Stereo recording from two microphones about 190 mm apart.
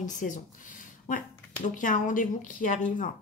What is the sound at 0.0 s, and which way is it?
Speech, 40° left (ahead or behind).